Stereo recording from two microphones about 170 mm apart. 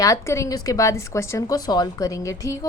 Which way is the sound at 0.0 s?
20° left (ahead or behind).